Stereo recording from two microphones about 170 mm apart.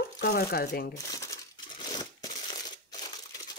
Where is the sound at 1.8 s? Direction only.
25° left (ahead or behind).